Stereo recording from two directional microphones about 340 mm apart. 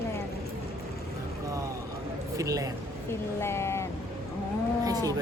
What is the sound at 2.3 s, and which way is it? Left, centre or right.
Speech, centre.